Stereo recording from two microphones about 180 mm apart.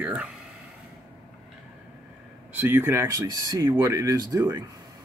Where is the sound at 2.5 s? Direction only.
10° right (ahead or behind).